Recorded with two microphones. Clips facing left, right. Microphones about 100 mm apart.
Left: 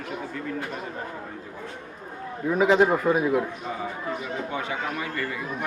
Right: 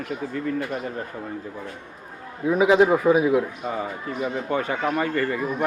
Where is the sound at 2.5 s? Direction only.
5° right (ahead or behind).